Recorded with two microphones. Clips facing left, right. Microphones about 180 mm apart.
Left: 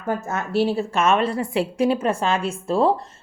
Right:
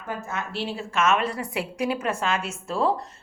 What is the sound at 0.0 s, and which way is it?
A woman's voice, 45° left (ahead or behind).